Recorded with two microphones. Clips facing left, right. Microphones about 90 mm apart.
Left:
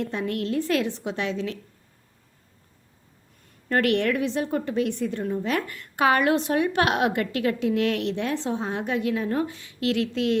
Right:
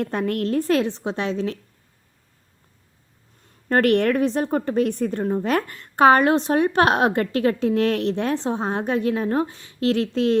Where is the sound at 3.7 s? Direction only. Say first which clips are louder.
Right 4 dB; 40° right (ahead or behind).